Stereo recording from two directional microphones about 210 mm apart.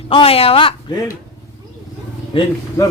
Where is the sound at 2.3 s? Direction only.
25° left (ahead or behind).